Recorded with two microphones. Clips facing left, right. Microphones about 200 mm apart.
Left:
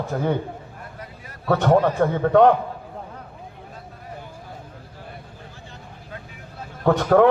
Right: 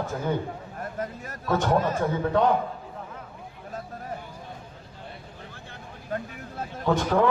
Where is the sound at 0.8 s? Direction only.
45° right (ahead or behind).